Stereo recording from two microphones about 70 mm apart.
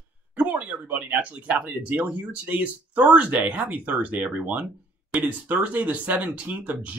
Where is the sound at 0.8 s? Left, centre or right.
Right.